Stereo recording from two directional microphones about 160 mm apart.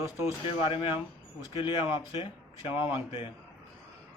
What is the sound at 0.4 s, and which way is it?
Speech, 35° left (ahead or behind).